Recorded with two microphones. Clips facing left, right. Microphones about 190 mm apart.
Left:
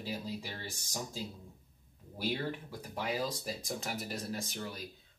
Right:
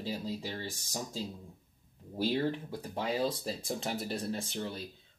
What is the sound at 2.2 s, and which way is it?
Speech, 30° right (ahead or behind).